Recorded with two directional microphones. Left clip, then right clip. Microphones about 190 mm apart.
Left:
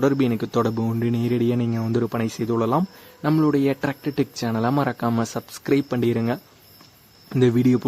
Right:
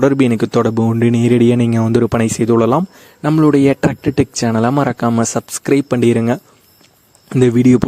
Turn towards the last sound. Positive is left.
turn(degrees=-40)  # may be behind; listen again after turning